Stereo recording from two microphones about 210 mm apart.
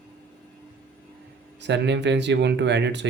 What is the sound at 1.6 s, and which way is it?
Speech, 55° right (ahead or behind).